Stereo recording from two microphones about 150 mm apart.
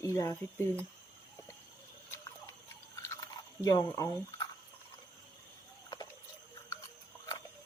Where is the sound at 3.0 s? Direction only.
20° left (ahead or behind).